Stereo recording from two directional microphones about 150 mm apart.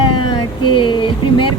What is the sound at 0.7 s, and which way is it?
Speech, 35° left (ahead or behind).